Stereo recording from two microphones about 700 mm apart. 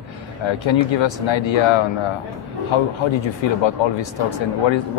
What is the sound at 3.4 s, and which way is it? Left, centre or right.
Speech, left.